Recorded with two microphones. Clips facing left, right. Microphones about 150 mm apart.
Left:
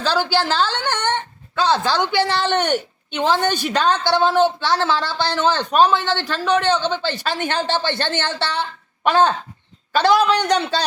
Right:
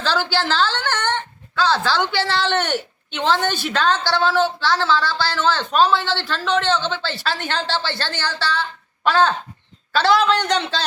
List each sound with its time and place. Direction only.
0.0 s a woman's voice: 10° left (ahead or behind)